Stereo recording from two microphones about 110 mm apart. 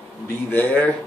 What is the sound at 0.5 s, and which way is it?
Speech, 15° left (ahead or behind).